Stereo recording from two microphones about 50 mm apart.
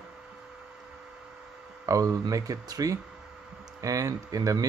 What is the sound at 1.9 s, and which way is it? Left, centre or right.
Speech, right.